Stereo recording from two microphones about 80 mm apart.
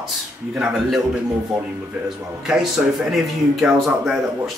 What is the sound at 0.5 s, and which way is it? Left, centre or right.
Speech, centre.